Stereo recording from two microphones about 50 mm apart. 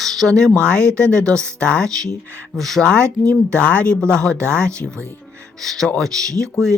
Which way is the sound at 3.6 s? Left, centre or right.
Left.